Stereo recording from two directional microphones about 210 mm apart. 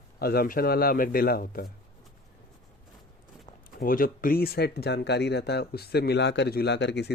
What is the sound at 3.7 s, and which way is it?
Speech, 40° left (ahead or behind).